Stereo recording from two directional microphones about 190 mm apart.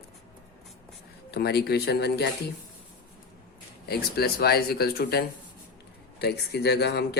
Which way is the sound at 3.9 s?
55° left (ahead or behind).